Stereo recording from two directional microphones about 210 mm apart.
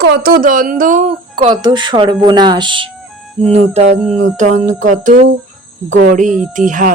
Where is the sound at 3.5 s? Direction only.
30° right (ahead or behind).